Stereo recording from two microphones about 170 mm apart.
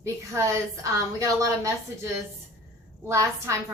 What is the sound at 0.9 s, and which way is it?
Speech, 20° right (ahead or behind).